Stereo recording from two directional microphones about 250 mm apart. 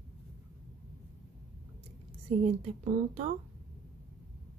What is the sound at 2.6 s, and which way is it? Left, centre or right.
Speech, right.